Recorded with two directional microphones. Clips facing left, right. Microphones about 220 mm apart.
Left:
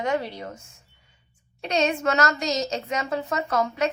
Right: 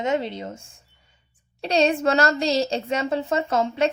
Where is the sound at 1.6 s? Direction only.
35° right (ahead or behind).